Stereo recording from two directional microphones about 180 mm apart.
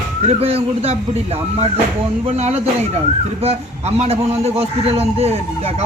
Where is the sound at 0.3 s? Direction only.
35° right (ahead or behind).